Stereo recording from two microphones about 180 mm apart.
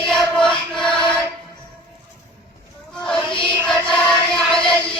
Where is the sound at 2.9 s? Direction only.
Centre (ahead or behind).